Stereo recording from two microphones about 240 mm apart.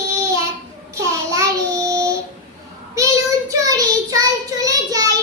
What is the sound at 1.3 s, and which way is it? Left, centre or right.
Child singing, centre.